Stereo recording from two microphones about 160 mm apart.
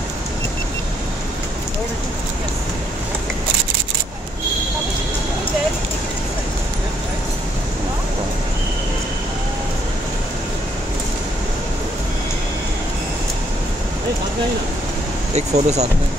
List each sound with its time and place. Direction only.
15.3 s speech: 45° right (ahead or behind)